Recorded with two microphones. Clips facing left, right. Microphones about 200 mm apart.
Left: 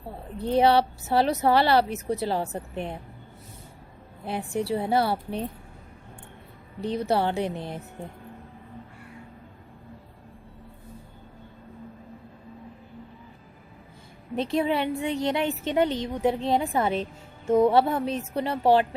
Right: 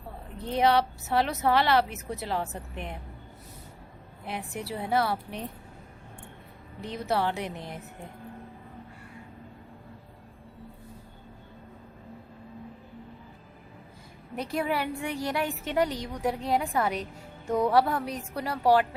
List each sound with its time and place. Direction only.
0.4 s a woman's voice: 30° left (ahead or behind)
4.3 s a woman's voice: 30° left (ahead or behind)
6.8 s a woman's voice: 30° left (ahead or behind)
14.3 s a woman's voice: 25° left (ahead or behind)